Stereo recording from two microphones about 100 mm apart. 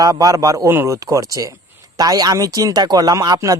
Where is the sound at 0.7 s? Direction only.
25° right (ahead or behind).